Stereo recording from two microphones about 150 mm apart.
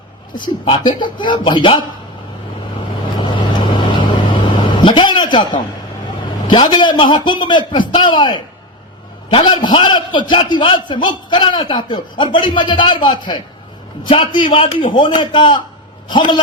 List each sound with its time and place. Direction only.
0.6 s a man's voice: 35° left (ahead or behind)
3.2 s vehicle: 35° left (ahead or behind)
6.5 s a man's voice: 30° left (ahead or behind)